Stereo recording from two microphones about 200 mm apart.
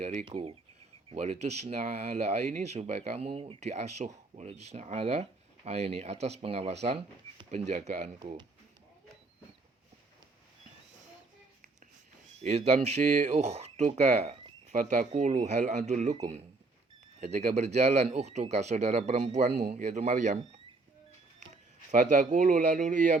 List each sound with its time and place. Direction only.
0.0 s speech: 30° right (ahead or behind)
7.7 s speech: 40° right (ahead or behind)
12.4 s speech: 30° right (ahead or behind)
21.9 s speech: 40° right (ahead or behind)